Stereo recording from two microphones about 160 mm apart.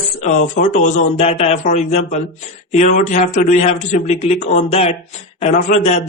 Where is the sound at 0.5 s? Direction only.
50° left (ahead or behind).